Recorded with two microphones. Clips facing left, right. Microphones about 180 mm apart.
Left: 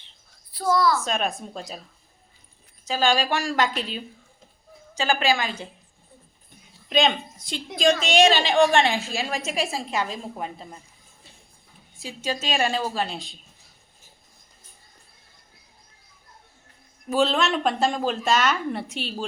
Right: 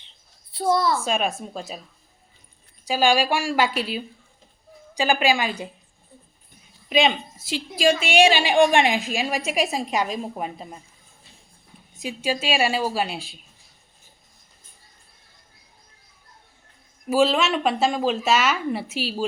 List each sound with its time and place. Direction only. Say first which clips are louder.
0.5 s a woman's voice: even; 25° right (ahead or behind)
1.0 s a woman's voice: right 2 dB; 10° right (ahead or behind)
2.8 s a woman's voice: right 3 dB; 10° right (ahead or behind)
6.9 s a woman's voice: right 1 dB; 5° right (ahead or behind)
11.9 s a woman's voice: right 4 dB; 15° right (ahead or behind)
17.1 s speech: right 2 dB; 5° right (ahead or behind)